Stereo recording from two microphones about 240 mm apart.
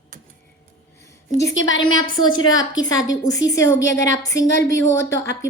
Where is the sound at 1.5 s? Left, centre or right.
Left.